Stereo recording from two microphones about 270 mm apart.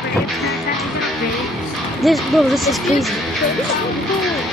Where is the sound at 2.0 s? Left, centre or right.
Centre.